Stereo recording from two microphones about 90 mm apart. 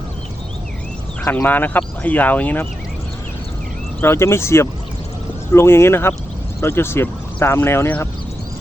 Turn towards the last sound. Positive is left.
turn(degrees=25)  # may be behind; listen again after turning